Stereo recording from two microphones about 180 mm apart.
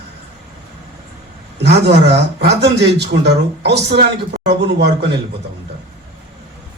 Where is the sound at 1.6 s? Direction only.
70° right (ahead or behind).